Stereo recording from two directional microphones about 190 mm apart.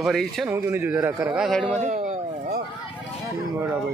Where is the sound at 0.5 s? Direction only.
10° right (ahead or behind).